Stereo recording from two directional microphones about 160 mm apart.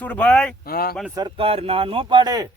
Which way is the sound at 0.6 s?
70° left (ahead or behind).